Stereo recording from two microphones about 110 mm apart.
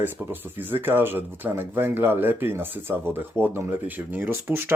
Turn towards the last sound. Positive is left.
turn(degrees=-20)  # may be behind; listen again after turning